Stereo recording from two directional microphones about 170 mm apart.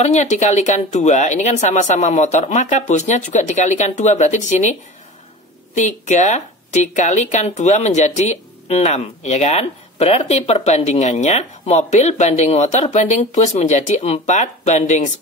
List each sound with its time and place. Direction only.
0.0 s speech: 45° left (ahead or behind)
5.8 s speech: 45° left (ahead or behind)